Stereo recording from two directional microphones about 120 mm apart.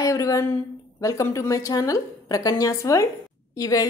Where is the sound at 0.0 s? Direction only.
25° left (ahead or behind).